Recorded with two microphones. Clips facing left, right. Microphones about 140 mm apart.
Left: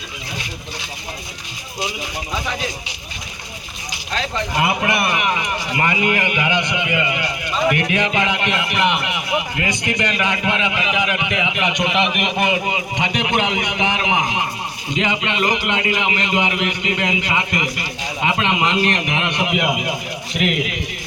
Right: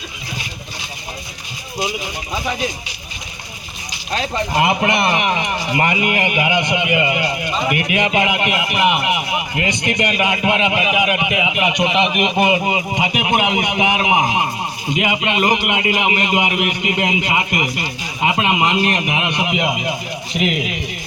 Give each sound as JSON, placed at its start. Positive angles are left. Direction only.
{"t": 4.6, "sound": "a man's voice", "side_deg": -25}